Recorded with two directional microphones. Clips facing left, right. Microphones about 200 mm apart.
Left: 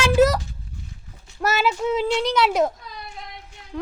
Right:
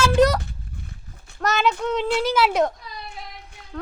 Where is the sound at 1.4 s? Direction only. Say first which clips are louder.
Even; 5° left (ahead or behind).